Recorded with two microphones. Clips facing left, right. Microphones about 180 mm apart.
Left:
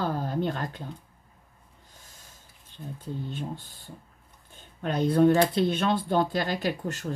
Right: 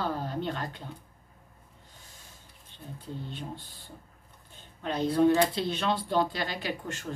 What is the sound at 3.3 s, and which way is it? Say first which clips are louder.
Speech: left 4 dB; 45° left (ahead or behind).